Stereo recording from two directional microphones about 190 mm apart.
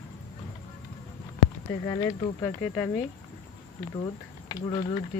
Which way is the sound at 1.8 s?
20° left (ahead or behind).